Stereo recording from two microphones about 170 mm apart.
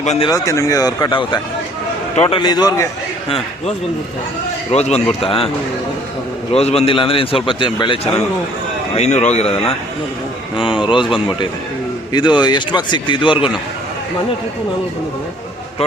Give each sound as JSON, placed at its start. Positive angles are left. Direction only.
{"t": 0.0, "sound": "speech", "side_deg": 40}
{"t": 0.4, "sound": "speech", "side_deg": 20}
{"t": 3.2, "sound": "a man's voice", "side_deg": 35}
{"t": 6.5, "sound": "a man's voice", "side_deg": 35}
{"t": 9.0, "sound": "a man's voice", "side_deg": 40}
{"t": 12.1, "sound": "speech", "side_deg": 25}